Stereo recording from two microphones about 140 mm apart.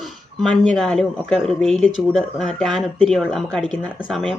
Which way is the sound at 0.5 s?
5° left (ahead or behind).